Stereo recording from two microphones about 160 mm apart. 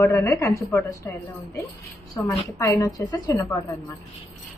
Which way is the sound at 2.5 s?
20° left (ahead or behind).